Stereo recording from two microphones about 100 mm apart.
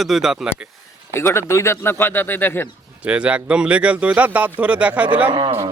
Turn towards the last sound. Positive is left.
turn(degrees=-60)  # may be behind; listen again after turning